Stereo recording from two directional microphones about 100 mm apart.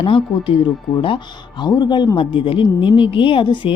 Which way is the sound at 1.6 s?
50° left (ahead or behind).